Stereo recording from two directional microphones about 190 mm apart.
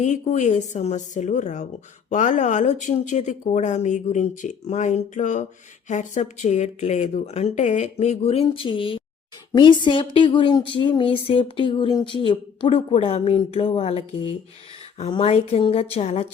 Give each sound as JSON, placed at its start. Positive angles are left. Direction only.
{"t": 0.0, "sound": "speech", "side_deg": 40}